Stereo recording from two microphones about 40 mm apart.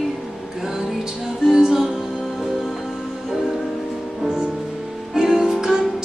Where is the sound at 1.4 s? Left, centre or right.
Centre.